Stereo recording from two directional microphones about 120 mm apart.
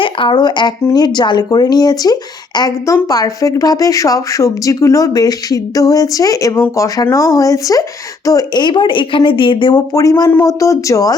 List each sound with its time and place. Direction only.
0.0 s speech: 45° left (ahead or behind)